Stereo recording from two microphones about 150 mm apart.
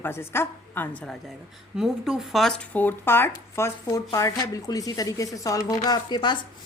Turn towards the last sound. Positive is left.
turn(degrees=30)  # may be behind; listen again after turning